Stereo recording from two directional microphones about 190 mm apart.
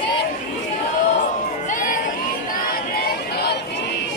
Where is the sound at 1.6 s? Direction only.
45° left (ahead or behind).